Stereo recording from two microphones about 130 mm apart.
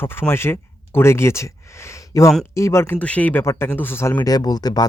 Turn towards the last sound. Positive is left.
turn(degrees=30)  # may be behind; listen again after turning